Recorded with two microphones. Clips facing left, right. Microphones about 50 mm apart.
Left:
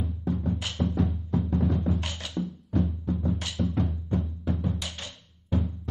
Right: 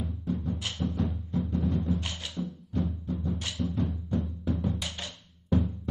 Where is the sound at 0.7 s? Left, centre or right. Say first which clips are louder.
Left 4 dB; left.